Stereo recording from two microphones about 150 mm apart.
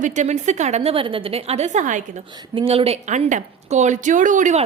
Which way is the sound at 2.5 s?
35° right (ahead or behind).